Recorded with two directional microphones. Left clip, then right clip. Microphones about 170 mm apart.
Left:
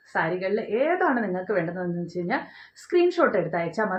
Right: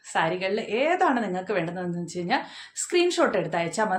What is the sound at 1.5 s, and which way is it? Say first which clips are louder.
Speech: left 3 dB; 20° right (ahead or behind).